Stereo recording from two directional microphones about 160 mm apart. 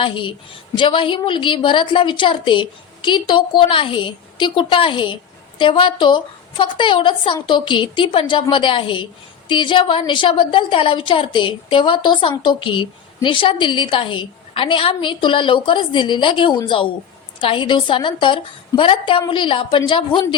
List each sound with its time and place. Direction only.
0.0 s a woman's voice: 30° left (ahead or behind)